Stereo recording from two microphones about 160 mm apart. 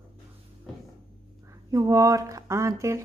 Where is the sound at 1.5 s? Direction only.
20° right (ahead or behind).